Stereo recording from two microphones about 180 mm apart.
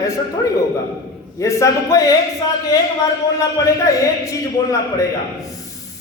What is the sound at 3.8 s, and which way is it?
A man's voice, 15° left (ahead or behind).